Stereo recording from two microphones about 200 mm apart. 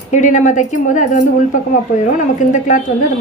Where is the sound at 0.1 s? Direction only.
40° left (ahead or behind).